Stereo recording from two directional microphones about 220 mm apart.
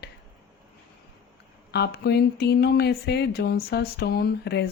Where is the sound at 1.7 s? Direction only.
50° left (ahead or behind).